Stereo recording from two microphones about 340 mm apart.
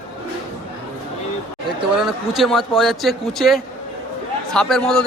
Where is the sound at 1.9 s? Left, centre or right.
Centre.